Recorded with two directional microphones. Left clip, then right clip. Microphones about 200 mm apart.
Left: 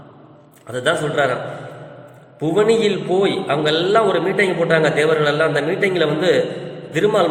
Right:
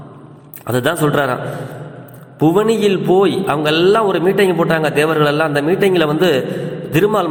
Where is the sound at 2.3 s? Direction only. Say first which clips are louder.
Right 4 dB; 35° right (ahead or behind).